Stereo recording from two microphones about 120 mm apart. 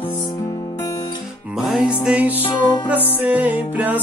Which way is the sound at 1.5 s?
5° right (ahead or behind).